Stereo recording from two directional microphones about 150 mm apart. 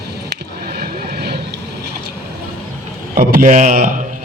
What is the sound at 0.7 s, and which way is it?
Vehicle, 90° right.